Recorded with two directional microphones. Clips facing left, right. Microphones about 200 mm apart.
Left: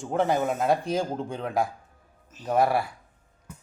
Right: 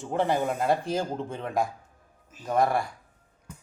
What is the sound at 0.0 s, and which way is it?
A man's voice, centre (ahead or behind).